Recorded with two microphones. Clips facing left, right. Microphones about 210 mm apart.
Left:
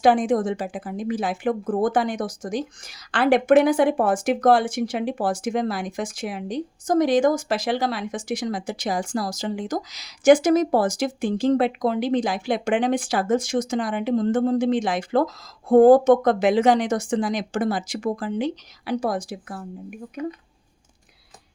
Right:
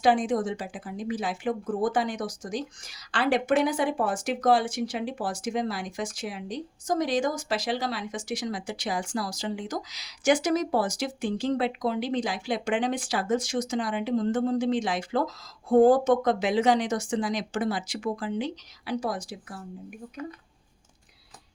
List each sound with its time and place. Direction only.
0.0 s speech: 50° left (ahead or behind)